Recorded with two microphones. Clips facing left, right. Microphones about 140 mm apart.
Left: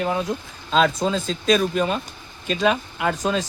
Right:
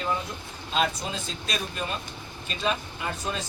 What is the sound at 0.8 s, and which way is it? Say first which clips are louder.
Speech: left 9 dB; 90° left.